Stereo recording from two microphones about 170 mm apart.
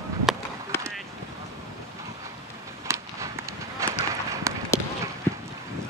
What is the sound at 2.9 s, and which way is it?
Run, 15° right (ahead or behind).